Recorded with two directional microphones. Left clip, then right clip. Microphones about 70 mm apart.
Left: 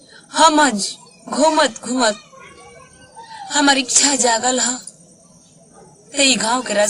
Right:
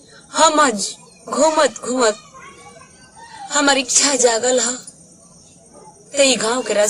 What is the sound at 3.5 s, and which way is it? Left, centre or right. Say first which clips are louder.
A woman's voice: left 1 dB; right.